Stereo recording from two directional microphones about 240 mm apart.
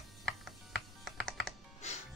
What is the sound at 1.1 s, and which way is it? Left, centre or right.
Computer keyboard, centre.